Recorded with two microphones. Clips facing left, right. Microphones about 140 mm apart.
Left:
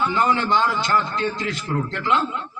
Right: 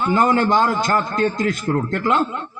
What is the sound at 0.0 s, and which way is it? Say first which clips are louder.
A man's voice: right 4 dB; 45° right (ahead or behind).